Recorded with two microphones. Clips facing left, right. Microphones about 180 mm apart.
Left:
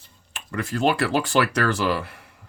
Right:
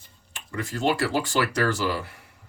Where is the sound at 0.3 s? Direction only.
65° left (ahead or behind).